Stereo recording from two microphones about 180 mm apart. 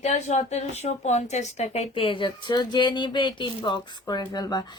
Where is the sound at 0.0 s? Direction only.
40° left (ahead or behind).